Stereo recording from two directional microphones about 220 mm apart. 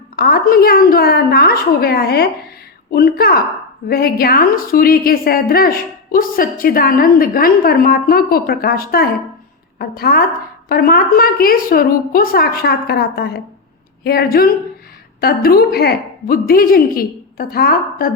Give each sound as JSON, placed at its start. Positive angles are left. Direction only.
{"t": 0.2, "sound": "a woman's voice", "side_deg": 45}